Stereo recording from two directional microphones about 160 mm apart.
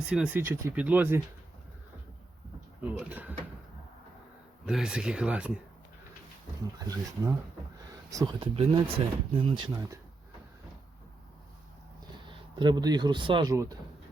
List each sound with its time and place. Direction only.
0.0 s speech: 5° right (ahead or behind)
2.8 s speech: 10° right (ahead or behind)
4.6 s speech: 5° right (ahead or behind)
6.7 s speech: 25° right (ahead or behind)
12.3 s speech: 30° right (ahead or behind)
13.5 s speech: 20° right (ahead or behind)